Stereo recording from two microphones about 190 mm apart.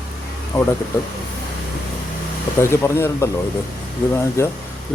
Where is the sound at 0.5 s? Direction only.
15° left (ahead or behind).